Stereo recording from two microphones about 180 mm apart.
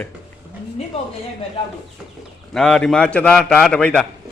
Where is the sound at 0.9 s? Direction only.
30° left (ahead or behind).